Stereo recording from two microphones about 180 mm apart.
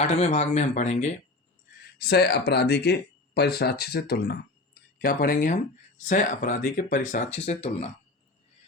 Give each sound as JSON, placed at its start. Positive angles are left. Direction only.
{"t": 0.0, "sound": "speech", "side_deg": 40}
{"t": 2.0, "sound": "speech", "side_deg": 60}